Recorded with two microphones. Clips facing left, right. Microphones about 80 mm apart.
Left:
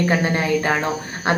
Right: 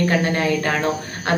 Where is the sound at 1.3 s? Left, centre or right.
Left.